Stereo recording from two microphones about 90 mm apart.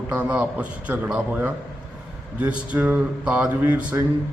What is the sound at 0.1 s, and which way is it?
Speech, 15° right (ahead or behind).